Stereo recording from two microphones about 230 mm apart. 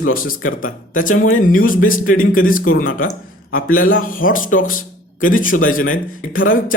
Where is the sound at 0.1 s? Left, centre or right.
Left.